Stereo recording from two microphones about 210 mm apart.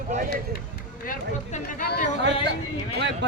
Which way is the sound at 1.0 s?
40° left (ahead or behind).